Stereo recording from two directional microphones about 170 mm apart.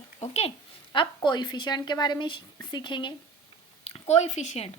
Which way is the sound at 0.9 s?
25° left (ahead or behind).